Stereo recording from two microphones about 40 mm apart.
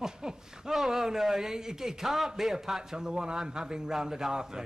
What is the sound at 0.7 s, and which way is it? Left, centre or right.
A man's voice, centre.